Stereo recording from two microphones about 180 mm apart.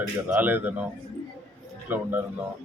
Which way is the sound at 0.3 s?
10° right (ahead or behind).